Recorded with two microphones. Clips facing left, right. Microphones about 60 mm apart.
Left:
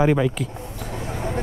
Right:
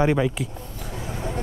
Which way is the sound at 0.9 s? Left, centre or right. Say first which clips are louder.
Left 3 dB; left.